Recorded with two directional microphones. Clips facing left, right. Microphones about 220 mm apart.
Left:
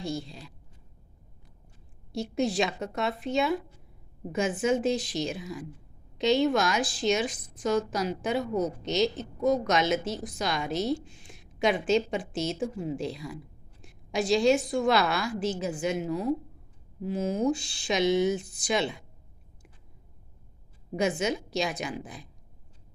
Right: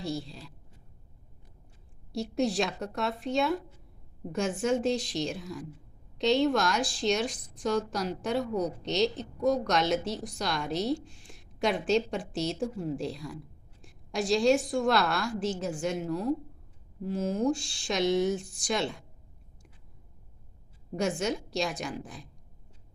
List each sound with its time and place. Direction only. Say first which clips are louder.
0.0 s a woman's voice: left 1 dB; centre (ahead or behind)
2.1 s a woman's voice: left 1 dB; centre (ahead or behind)
20.9 s a woman's voice: left 2 dB; centre (ahead or behind)